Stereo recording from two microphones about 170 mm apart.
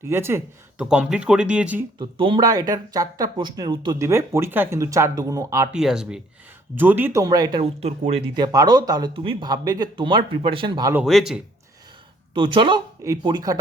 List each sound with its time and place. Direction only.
0.1 s speech: 15° right (ahead or behind)
2.0 s speech: 30° right (ahead or behind)
5.7 s speech: 5° right (ahead or behind); by 7.6 s 25° right (ahead or behind)
7.6 s speech: 40° right (ahead or behind)
8.4 s speech: 25° right (ahead or behind)
10.9 s speech: centre (ahead or behind)
12.3 s speech: 30° right (ahead or behind)